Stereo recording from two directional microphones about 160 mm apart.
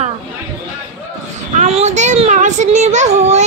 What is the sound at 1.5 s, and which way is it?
A child's voice, 45° right (ahead or behind).